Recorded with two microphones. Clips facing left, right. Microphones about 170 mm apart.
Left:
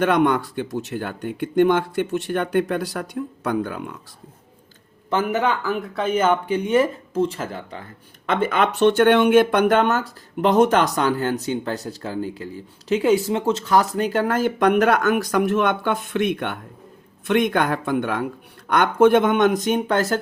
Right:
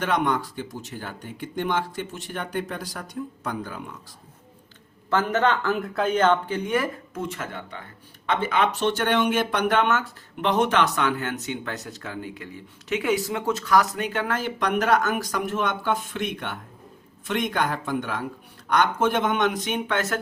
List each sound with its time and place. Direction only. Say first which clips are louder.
0.0 s speech: left 6 dB; 55° left (ahead or behind)
5.0 s speech: left 1 dB; 15° left (ahead or behind); by 7.9 s 35° left (ahead or behind)
8.3 s speech: left 3 dB; 50° left (ahead or behind)